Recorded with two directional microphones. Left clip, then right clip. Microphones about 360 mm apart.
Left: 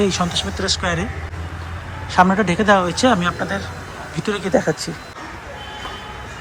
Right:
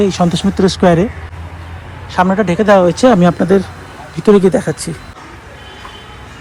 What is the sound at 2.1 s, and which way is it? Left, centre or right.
Speech, centre.